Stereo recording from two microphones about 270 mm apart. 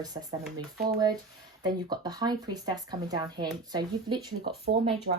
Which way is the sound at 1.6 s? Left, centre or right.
Centre.